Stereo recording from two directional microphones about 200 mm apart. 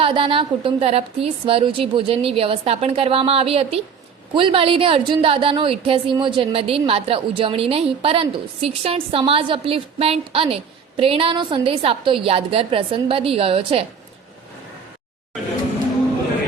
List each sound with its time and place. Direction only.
0.0 s a woman's voice: 25° right (ahead or behind)